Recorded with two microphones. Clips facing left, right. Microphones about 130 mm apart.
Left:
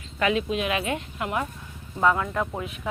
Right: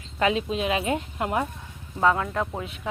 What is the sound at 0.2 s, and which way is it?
Speech, 30° right (ahead or behind).